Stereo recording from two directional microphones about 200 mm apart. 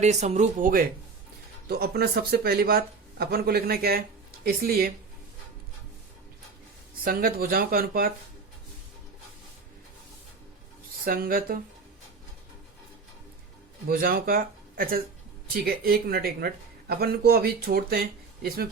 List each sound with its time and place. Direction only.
0.0 s speech: 35° right (ahead or behind)
7.0 s speech: 45° right (ahead or behind)
11.0 s speech: 45° right (ahead or behind)
13.8 s speech: 45° right (ahead or behind)